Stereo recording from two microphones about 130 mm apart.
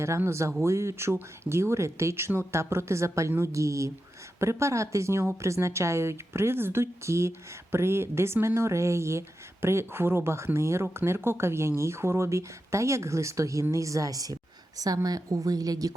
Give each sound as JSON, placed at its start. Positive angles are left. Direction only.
{"t": 0.0, "sound": "a woman's voice", "side_deg": -20}